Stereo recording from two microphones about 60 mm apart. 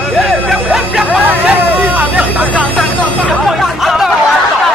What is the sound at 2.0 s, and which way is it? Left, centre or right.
Vehicle, right.